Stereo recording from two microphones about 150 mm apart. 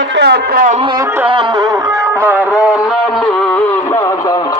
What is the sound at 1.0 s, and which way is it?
Music, 15° right (ahead or behind).